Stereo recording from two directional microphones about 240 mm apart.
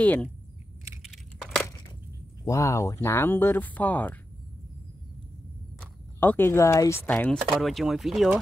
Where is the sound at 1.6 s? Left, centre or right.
Centre.